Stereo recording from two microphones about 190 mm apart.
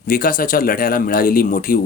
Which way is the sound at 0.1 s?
45° left (ahead or behind).